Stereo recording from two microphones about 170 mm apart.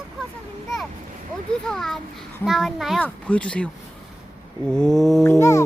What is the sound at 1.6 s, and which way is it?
Speech, 5° left (ahead or behind).